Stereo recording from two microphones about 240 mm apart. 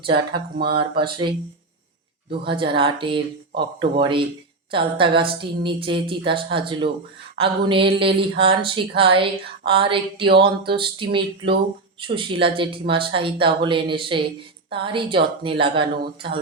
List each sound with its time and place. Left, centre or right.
0.0 s a woman's voice: right
2.4 s a woman's voice: right